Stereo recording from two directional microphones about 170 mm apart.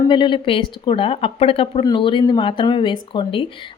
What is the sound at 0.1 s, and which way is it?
Speech, 30° left (ahead or behind).